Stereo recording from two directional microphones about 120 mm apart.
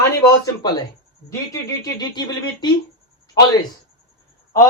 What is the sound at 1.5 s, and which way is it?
Speech, 35° left (ahead or behind).